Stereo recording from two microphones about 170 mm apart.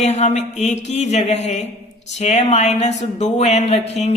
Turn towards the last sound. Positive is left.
turn(degrees=40)  # may be behind; listen again after turning